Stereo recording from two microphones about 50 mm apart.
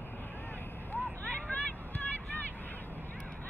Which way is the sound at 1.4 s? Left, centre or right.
Left.